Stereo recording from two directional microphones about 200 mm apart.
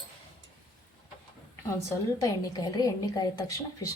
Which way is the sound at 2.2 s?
20° left (ahead or behind).